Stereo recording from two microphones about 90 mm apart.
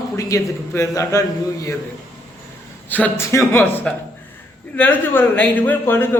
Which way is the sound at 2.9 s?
20° left (ahead or behind).